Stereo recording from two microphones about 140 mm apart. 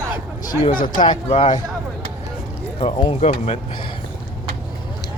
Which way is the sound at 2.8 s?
35° left (ahead or behind).